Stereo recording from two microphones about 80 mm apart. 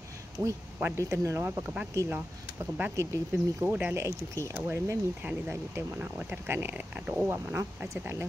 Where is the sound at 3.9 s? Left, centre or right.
Right.